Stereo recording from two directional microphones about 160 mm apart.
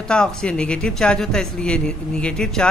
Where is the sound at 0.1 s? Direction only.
5° left (ahead or behind).